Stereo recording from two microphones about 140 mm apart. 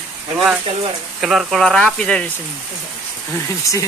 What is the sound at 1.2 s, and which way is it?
Speech, 5° right (ahead or behind).